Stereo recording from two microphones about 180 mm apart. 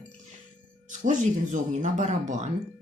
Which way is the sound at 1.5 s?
45° right (ahead or behind).